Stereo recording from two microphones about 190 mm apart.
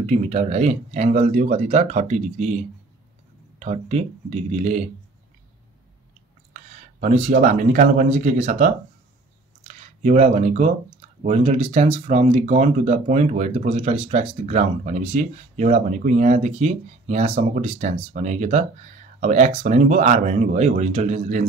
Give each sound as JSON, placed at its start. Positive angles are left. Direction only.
{"t": 0.0, "sound": "speech", "side_deg": -35}
{"t": 6.5, "sound": "speech", "side_deg": -40}